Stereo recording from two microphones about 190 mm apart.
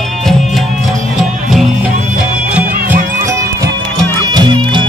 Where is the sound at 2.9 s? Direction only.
15° right (ahead or behind).